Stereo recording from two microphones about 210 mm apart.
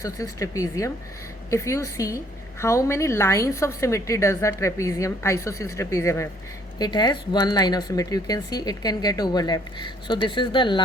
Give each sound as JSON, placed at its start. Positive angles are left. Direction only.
{"t": 0.0, "sound": "a woman's voice", "side_deg": 15}